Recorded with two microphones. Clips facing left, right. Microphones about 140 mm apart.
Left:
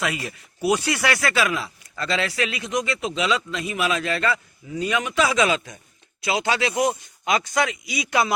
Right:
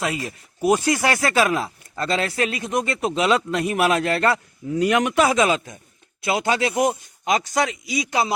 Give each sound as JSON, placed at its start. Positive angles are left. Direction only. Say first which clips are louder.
{"t": 0.0, "sound": "a man's voice", "louder": "right 1 dB", "side_deg": -35}